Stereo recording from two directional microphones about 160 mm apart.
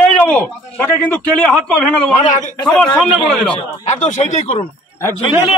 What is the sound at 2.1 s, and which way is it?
Speech, 50° left (ahead or behind).